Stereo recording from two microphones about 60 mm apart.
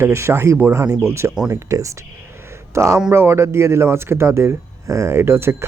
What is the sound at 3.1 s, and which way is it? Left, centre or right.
Speech, right.